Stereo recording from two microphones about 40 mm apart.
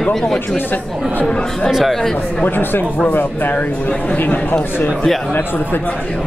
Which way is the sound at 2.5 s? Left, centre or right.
Left.